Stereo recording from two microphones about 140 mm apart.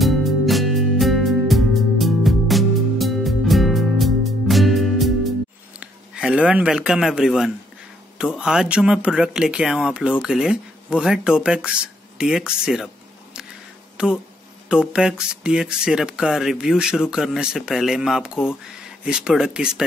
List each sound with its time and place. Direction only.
0.0 s music: centre (ahead or behind)
5.8 s a man's voice: 5° right (ahead or behind)
14.7 s speech: 5° right (ahead or behind)